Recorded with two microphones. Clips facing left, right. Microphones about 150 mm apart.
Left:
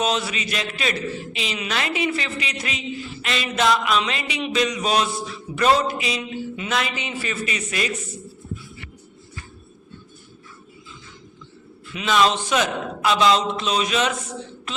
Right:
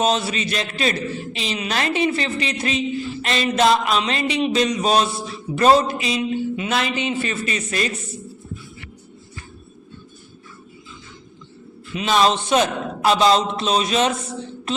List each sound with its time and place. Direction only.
0.0 s a man's voice: 30° right (ahead or behind)
11.9 s a man's voice: 30° right (ahead or behind)